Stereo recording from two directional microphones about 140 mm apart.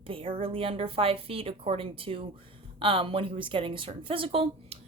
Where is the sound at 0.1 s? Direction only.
40° right (ahead or behind).